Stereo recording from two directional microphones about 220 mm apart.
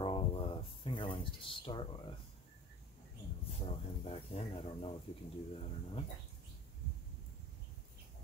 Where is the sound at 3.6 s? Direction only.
25° left (ahead or behind).